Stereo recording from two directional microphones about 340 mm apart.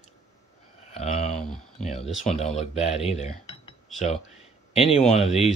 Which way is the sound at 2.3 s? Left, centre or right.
Centre.